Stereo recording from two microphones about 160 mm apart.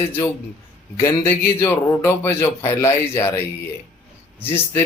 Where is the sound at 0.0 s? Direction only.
15° left (ahead or behind).